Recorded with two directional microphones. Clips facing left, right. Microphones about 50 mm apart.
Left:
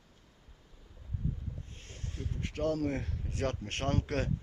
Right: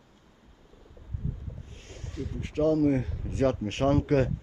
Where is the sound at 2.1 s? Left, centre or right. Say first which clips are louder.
Right 7 dB; right.